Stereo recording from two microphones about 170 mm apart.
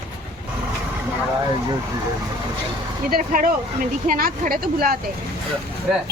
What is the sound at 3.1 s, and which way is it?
Speech, 55° right (ahead or behind).